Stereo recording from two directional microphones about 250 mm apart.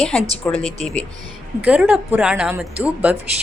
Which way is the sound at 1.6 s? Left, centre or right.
Centre.